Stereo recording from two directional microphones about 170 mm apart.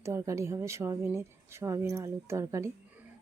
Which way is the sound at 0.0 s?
15° right (ahead or behind).